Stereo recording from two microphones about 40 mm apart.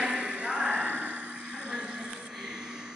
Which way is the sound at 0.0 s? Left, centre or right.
Right.